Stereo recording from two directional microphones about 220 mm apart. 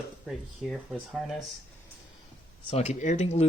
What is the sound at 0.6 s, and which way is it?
Speech, centre (ahead or behind).